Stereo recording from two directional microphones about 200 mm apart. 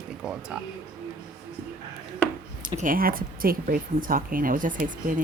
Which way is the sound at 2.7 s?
45° right (ahead or behind).